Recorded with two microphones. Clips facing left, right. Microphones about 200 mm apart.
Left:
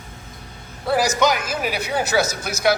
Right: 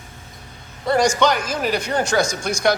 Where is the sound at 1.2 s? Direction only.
10° left (ahead or behind).